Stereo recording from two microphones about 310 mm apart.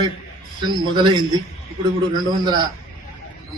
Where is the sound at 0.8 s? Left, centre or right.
Centre.